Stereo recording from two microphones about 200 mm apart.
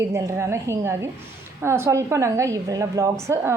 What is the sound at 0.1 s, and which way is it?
A woman's voice, 15° right (ahead or behind).